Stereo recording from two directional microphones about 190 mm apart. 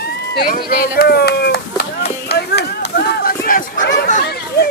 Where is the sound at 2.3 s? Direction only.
60° left (ahead or behind).